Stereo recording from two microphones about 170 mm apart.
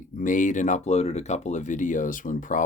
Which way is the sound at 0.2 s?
50° left (ahead or behind).